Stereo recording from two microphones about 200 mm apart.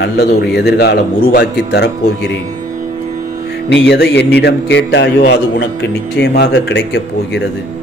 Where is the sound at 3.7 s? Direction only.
60° left (ahead or behind).